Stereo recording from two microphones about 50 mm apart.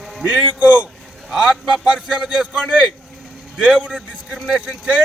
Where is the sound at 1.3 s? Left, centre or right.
Centre.